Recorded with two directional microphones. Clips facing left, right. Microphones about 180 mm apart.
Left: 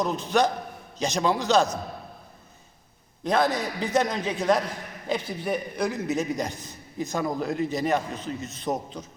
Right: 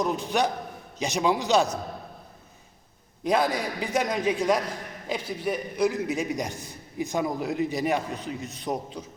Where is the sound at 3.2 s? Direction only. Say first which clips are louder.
Left 1 dB; 10° right (ahead or behind).